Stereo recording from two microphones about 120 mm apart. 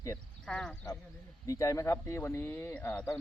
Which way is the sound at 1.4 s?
25° left (ahead or behind).